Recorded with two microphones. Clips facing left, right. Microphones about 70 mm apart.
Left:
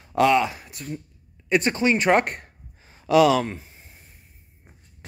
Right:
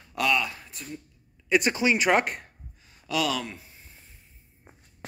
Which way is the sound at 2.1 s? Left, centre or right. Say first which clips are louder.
Left 4 dB; left.